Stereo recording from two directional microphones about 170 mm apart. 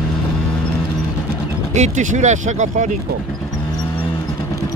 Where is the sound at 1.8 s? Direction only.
45° right (ahead or behind).